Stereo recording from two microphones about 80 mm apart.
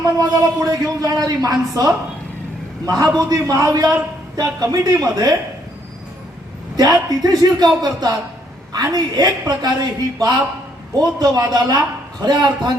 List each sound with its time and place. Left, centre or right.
0.0 s a woman's voice: right
6.7 s a man's voice: right
12.2 s a man's voice: right